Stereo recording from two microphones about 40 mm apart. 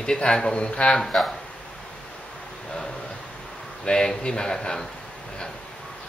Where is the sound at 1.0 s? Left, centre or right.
Centre.